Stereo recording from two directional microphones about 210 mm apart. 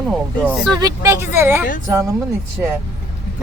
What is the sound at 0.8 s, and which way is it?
Speech, 15° right (ahead or behind).